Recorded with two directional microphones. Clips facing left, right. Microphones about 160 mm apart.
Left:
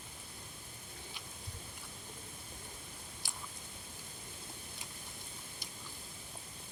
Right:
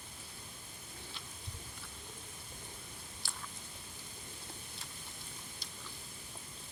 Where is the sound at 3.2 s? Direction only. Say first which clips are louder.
Right 1 dB; 15° left (ahead or behind).